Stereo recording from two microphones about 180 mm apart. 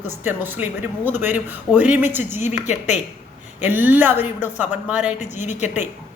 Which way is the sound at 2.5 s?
40° left (ahead or behind).